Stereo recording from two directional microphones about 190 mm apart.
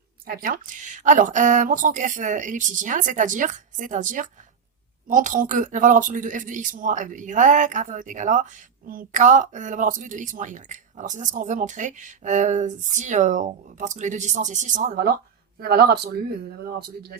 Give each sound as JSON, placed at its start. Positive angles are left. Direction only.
{"t": 0.3, "sound": "speech", "side_deg": -50}